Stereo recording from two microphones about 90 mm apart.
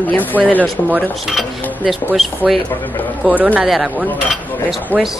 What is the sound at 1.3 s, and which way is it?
Speech, centre (ahead or behind).